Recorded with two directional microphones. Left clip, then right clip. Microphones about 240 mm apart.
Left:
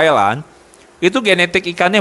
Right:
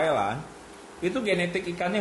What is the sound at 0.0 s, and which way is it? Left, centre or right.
A man's voice, left.